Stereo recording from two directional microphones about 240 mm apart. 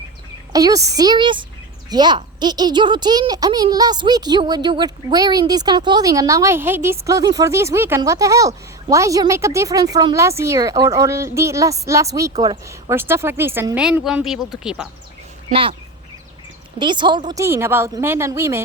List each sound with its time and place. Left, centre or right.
0.5 s speech: centre
15.4 s speech: right
16.7 s speech: centre